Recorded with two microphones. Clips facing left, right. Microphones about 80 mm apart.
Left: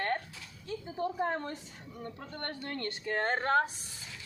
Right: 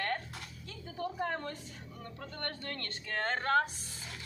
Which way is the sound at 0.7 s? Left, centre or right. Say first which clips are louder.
Left 5 dB; left.